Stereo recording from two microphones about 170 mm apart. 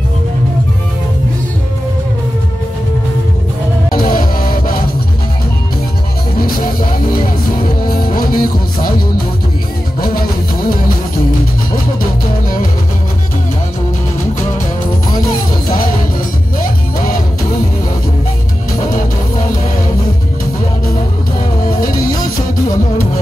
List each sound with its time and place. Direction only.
3.9 s music: 55° left (ahead or behind)
7.6 s music: 55° left (ahead or behind)
9.9 s music: 60° left (ahead or behind)
21.6 s music: 55° left (ahead or behind)